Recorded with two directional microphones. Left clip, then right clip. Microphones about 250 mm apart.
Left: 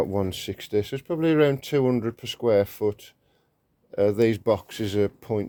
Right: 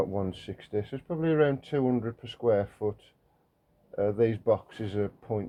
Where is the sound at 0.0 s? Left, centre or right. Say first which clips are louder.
Left 5 dB; left.